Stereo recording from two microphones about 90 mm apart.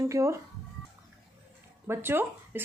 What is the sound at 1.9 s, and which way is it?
Speech, 25° right (ahead or behind).